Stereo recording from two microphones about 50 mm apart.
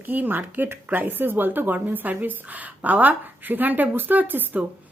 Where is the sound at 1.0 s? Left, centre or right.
Right.